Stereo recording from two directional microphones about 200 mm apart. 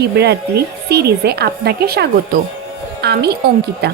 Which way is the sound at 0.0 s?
55° right (ahead or behind).